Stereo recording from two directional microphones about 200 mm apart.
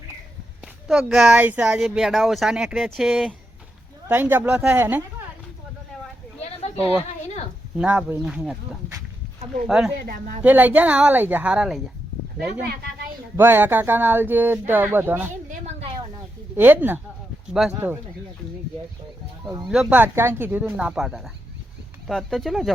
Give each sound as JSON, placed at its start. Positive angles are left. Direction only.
{"t": 0.6, "sound": "speech", "side_deg": 0}
{"t": 7.8, "sound": "speech", "side_deg": -5}
{"t": 9.6, "sound": "speech", "side_deg": -5}
{"t": 15.4, "sound": "a sound", "side_deg": -35}
{"t": 16.6, "sound": "speech", "side_deg": -10}
{"t": 19.6, "sound": "speech", "side_deg": -5}